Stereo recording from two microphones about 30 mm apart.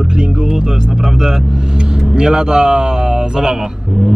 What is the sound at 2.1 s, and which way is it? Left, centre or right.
Speech, right.